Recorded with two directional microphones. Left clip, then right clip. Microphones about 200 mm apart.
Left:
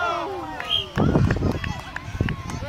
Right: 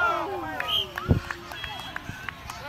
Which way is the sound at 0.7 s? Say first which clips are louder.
Left 3 dB; 5° right (ahead or behind).